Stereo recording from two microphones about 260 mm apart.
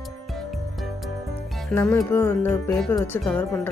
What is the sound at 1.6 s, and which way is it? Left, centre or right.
Speech, centre.